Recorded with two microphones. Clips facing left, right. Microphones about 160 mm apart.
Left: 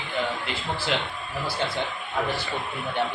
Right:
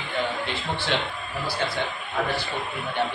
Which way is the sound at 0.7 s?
5° left (ahead or behind).